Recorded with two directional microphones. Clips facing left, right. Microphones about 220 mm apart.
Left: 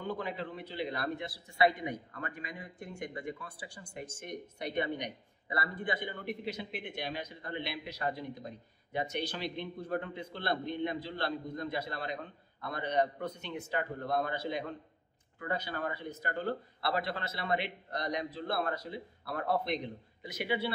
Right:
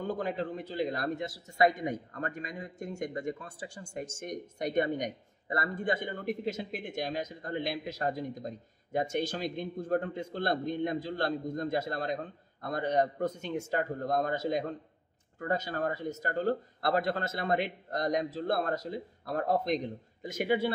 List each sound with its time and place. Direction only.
0.0 s a man's voice: 45° right (ahead or behind)